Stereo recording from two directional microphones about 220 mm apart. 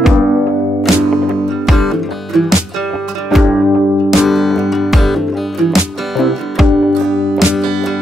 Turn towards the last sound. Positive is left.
turn(degrees=0)  # may be behind; listen again after turning